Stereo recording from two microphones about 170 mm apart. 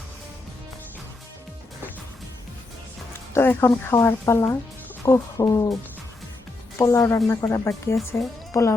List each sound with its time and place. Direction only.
3.1 s speech: 15° left (ahead or behind)
5.0 s music: 20° left (ahead or behind)
6.7 s a woman's voice: 15° left (ahead or behind)